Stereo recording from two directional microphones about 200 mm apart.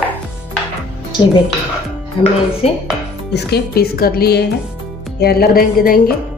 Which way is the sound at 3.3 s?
50° left (ahead or behind).